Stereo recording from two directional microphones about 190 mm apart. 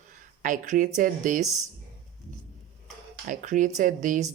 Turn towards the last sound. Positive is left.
turn(degrees=-45)  # may be behind; listen again after turning